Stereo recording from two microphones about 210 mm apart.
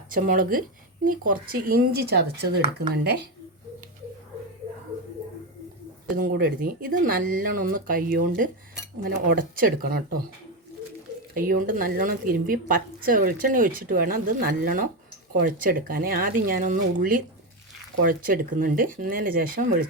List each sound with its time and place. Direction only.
0.1 s speech: 40° right (ahead or behind)
6.1 s speech: 40° right (ahead or behind)
11.3 s speech: 40° right (ahead or behind)